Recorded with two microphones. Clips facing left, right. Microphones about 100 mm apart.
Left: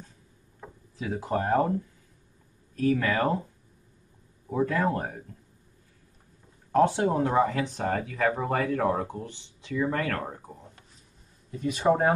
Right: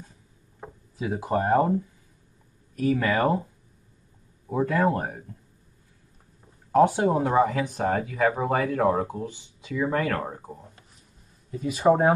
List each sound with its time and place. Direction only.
0.9 s speech: 20° right (ahead or behind)
2.7 s speech: 15° right (ahead or behind)
4.5 s speech: 15° right (ahead or behind)
6.7 s speech: 10° right (ahead or behind)